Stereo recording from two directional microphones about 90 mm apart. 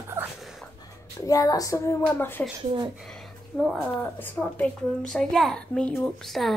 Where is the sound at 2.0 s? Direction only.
25° left (ahead or behind).